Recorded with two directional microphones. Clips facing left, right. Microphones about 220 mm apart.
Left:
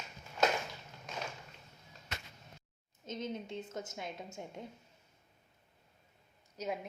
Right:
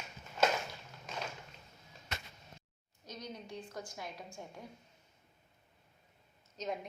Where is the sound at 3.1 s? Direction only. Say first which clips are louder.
Left 6 dB; 25° left (ahead or behind).